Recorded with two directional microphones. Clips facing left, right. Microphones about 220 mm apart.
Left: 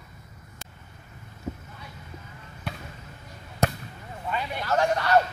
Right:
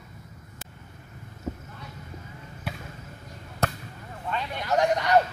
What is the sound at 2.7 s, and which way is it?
Basketball bounce, 5° right (ahead or behind).